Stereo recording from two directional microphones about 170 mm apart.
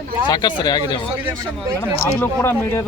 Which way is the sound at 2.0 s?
15° left (ahead or behind).